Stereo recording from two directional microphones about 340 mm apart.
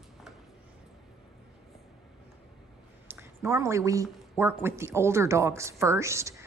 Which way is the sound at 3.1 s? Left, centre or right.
Centre.